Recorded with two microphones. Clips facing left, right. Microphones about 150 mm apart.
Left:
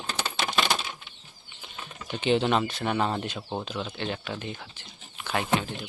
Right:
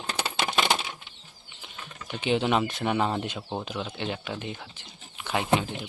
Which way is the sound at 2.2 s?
5° right (ahead or behind).